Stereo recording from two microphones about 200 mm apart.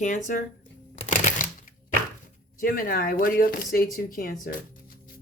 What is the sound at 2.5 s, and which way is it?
Speech, 45° left (ahead or behind).